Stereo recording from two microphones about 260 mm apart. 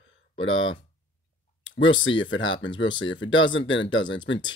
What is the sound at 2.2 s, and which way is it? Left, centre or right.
Speech, left.